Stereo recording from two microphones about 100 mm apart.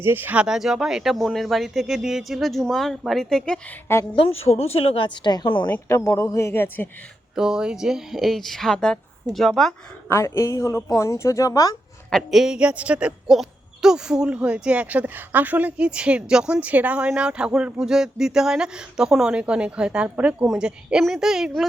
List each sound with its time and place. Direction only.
0.0 s speech: 20° right (ahead or behind); by 3.6 s 5° left (ahead or behind)
4.1 s a woman's voice: 75° left (ahead or behind); by 5.6 s 50° left (ahead or behind)
5.9 s a man's voice: 30° left (ahead or behind)
7.3 s speech: 5° right (ahead or behind)
10.1 s a man's voice: 25° left (ahead or behind)
12.1 s a woman's voice: centre (ahead or behind)